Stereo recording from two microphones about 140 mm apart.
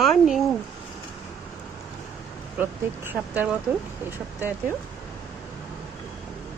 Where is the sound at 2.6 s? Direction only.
15° right (ahead or behind).